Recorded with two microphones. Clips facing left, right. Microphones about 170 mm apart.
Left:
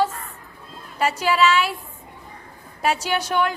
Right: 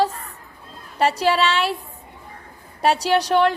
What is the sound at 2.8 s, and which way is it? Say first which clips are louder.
Speech: right 4 dB; 35° right (ahead or behind).